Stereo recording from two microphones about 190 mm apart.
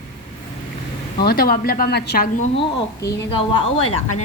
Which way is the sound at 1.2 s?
55° left (ahead or behind).